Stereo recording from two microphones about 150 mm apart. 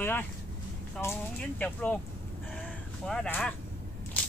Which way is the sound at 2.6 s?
5° left (ahead or behind).